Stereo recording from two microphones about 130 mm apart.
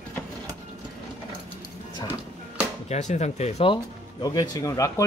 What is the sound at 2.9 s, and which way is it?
Speech, 65° left (ahead or behind).